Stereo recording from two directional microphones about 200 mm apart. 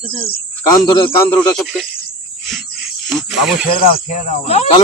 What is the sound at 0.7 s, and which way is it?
Speech, 20° left (ahead or behind).